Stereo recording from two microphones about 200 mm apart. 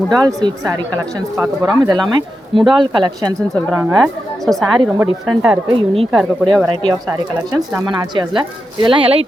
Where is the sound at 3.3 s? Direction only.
5° left (ahead or behind).